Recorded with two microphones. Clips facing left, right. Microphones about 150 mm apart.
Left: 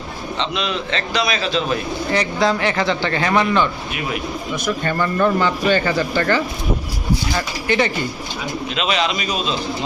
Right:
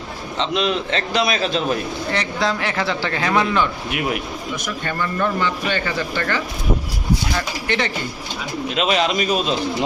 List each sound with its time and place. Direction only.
0.3 s a man's voice: 40° right (ahead or behind)
2.1 s speech: centre (ahead or behind)
4.5 s a man's voice: 40° left (ahead or behind)
8.7 s a man's voice: 50° right (ahead or behind)